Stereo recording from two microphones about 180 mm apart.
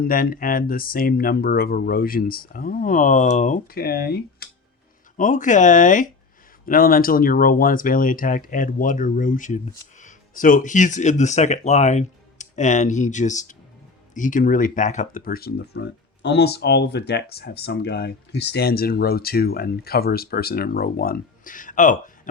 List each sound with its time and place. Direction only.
0.0 s speech: 55° left (ahead or behind)
5.1 s speech: 45° left (ahead or behind)